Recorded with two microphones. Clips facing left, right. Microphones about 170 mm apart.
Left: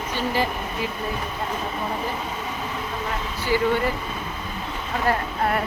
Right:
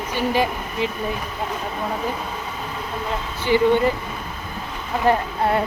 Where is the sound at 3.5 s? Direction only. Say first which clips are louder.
Right 5 dB; 20° right (ahead or behind).